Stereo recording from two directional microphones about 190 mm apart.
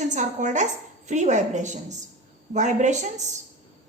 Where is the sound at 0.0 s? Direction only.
40° right (ahead or behind).